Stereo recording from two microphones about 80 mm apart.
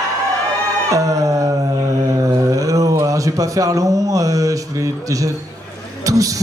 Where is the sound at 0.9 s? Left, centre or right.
Right.